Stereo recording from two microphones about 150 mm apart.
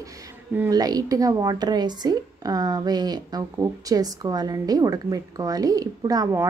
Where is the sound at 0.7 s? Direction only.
25° right (ahead or behind).